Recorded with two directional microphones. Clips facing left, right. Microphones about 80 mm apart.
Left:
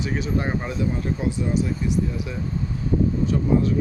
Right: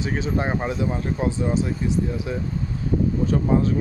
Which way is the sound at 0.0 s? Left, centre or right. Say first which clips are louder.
Right 1 dB; right.